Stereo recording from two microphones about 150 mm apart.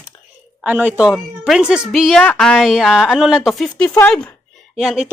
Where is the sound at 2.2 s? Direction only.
10° left (ahead or behind).